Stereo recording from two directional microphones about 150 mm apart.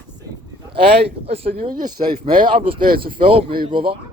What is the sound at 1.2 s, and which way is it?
Speech, 40° right (ahead or behind).